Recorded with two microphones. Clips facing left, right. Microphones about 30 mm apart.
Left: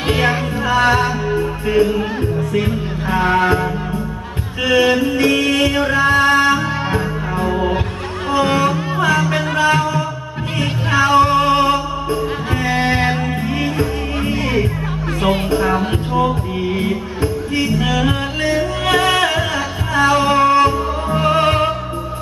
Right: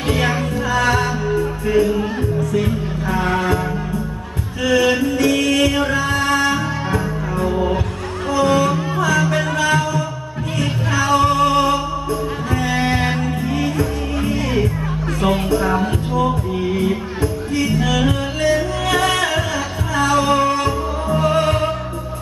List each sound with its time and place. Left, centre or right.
0.1 s music: left
4.6 s music: left
15.6 s music: left
15.9 s music: left
17.7 s music: left
18.1 s music: left